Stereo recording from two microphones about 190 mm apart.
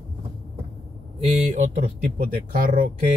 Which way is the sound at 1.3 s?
40° right (ahead or behind).